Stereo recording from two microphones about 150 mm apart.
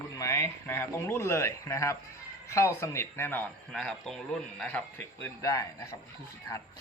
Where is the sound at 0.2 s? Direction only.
20° left (ahead or behind).